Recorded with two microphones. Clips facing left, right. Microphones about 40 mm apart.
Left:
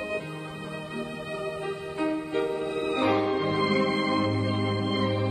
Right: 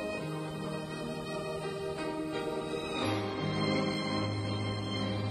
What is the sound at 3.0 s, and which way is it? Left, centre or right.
Music, left.